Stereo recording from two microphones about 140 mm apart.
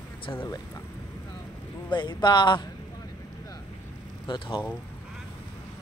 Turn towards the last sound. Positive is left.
turn(degrees=35)  # may be behind; listen again after turning